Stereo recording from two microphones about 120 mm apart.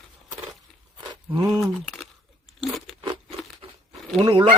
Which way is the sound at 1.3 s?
30° right (ahead or behind).